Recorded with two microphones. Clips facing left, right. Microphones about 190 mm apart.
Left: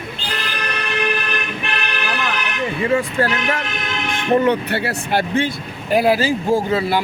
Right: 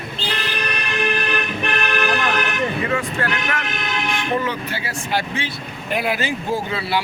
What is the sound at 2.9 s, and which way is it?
Speech, 30° left (ahead or behind).